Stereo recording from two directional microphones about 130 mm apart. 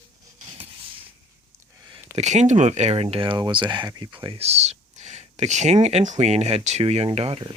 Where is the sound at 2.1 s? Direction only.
60° right (ahead or behind); by 4.1 s 30° right (ahead or behind).